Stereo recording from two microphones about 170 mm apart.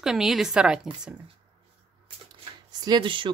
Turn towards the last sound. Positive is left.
turn(degrees=-30)  # may be behind; listen again after turning